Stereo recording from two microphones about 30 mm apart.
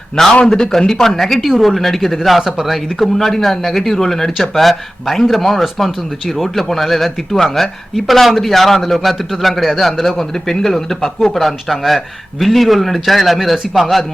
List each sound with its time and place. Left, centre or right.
0.2 s speech: centre
1.4 s a man's voice: centre